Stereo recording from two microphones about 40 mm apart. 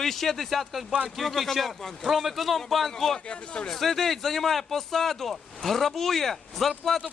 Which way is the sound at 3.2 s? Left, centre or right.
Left.